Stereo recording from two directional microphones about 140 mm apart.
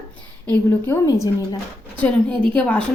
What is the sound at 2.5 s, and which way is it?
Speech, 10° left (ahead or behind).